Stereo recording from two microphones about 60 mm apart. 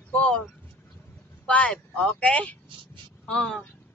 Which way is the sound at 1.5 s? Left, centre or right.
Left.